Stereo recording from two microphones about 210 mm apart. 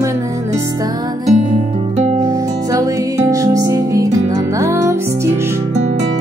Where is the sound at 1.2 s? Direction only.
35° right (ahead or behind).